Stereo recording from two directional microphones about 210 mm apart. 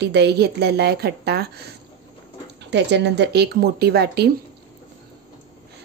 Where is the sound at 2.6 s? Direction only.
55° right (ahead or behind).